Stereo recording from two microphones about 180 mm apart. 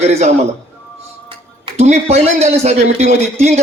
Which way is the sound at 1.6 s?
35° right (ahead or behind).